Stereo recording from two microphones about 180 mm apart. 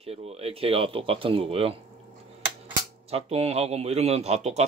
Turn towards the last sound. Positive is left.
turn(degrees=-35)  # may be behind; listen again after turning